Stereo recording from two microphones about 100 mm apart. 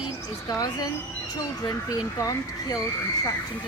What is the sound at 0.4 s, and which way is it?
A woman's voice, 40° left (ahead or behind).